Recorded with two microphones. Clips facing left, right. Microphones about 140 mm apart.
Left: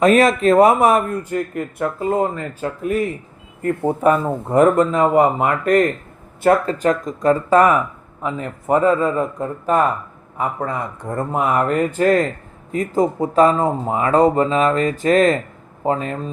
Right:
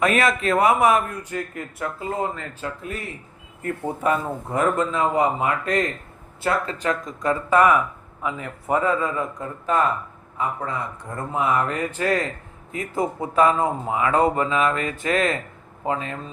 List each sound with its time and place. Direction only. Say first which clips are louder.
0.0 s speech: left 7 dB; 35° left (ahead or behind)